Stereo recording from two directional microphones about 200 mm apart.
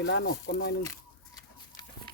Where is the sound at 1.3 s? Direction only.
20° left (ahead or behind).